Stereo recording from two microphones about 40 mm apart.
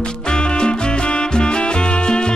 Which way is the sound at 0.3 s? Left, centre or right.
Left.